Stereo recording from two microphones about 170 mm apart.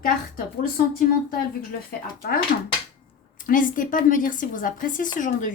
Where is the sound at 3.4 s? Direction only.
55° left (ahead or behind).